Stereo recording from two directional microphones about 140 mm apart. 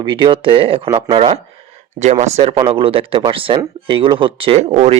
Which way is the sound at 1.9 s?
55° right (ahead or behind).